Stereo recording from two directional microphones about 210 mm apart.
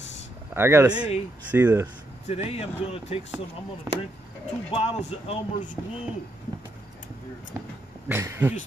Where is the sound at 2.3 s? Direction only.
30° left (ahead or behind).